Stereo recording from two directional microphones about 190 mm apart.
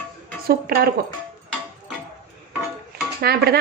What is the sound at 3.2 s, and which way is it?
Speech, 55° right (ahead or behind).